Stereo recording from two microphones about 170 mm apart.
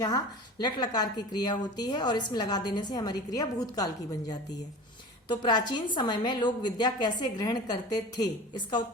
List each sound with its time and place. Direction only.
0.6 s a woman's voice: 25° left (ahead or behind)
5.3 s a woman's voice: 25° left (ahead or behind)